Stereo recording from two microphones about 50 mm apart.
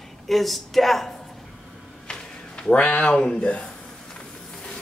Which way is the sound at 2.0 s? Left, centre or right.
Centre.